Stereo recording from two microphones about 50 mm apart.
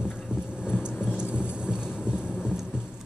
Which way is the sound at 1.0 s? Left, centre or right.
Centre.